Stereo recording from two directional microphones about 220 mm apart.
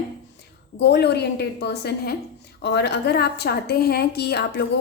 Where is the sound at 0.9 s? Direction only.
50° left (ahead or behind).